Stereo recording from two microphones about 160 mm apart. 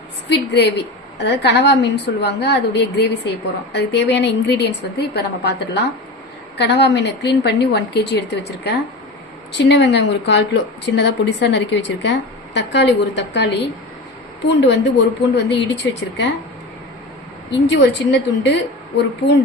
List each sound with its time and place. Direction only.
0.3 s a woman's voice: 90° left
17.5 s a woman's voice: 90° left